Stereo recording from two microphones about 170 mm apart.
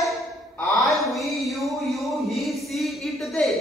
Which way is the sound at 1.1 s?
Centre (ahead or behind).